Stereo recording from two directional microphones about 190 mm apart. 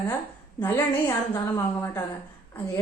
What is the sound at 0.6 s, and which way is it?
A woman's voice, 10° left (ahead or behind).